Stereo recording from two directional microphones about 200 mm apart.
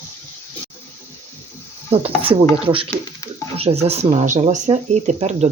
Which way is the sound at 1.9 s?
30° right (ahead or behind).